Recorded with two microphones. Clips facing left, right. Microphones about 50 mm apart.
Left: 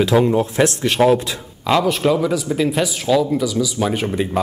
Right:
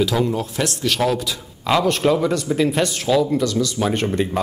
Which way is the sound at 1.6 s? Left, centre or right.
Centre.